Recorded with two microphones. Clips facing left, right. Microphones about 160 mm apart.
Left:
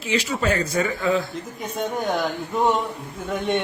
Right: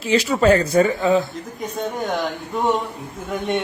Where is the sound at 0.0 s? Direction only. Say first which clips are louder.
Right 7 dB; 35° right (ahead or behind).